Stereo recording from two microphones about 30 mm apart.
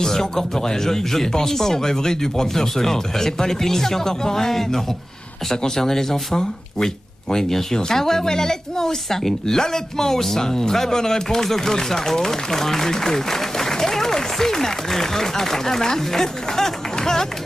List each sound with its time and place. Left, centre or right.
0.0 s speech: centre